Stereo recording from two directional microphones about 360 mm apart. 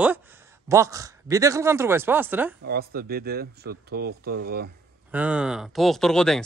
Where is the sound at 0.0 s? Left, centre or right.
Centre.